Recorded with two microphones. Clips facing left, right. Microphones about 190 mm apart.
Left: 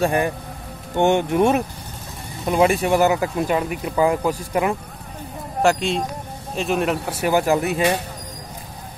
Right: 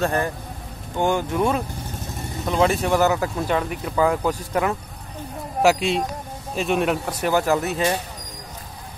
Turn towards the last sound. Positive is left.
turn(degrees=10)  # may be behind; listen again after turning